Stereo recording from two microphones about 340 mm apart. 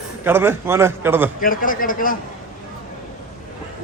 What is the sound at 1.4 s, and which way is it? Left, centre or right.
Speech, left.